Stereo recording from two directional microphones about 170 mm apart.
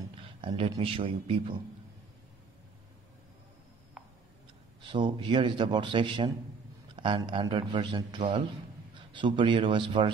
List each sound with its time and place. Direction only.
0.1 s speech: 30° right (ahead or behind)
4.0 s tick: 5° right (ahead or behind)
4.8 s a man's voice: 25° right (ahead or behind)